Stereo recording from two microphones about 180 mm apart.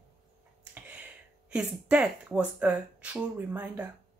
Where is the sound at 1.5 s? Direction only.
5° right (ahead or behind).